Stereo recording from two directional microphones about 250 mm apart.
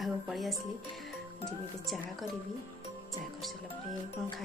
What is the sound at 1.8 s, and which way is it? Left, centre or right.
Speech, centre.